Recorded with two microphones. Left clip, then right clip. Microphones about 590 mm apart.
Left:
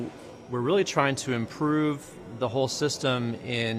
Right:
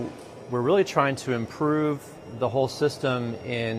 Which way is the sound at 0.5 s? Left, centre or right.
Right.